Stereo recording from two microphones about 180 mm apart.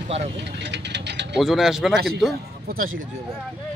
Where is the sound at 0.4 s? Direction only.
75° right (ahead or behind).